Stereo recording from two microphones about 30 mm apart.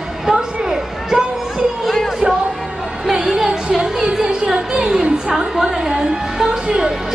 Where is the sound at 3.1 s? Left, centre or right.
Centre.